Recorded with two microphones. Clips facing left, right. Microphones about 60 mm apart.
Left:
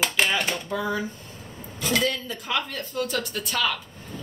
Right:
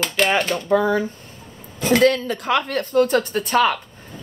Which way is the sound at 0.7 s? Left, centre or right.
Right.